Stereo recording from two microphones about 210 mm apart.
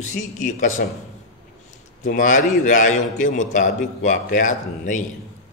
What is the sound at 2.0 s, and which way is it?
A man's voice, 35° left (ahead or behind).